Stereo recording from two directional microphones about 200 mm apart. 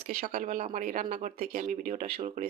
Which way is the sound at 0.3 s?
40° right (ahead or behind).